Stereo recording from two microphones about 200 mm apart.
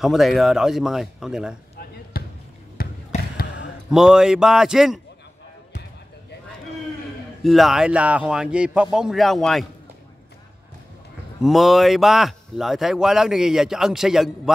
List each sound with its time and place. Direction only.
0.0 s speech: centre (ahead or behind)
2.1 s basketball bounce: 45° left (ahead or behind)
3.9 s speech: 5° right (ahead or behind)
7.4 s speech: centre (ahead or behind)
11.4 s speech: centre (ahead or behind)